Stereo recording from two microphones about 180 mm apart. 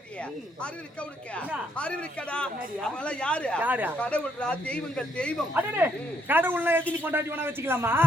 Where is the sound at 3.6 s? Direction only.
10° right (ahead or behind).